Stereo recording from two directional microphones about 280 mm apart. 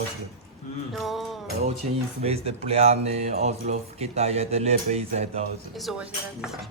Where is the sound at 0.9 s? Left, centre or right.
Centre.